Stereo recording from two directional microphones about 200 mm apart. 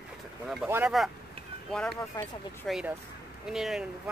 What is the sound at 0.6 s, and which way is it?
Speech, 10° right (ahead or behind).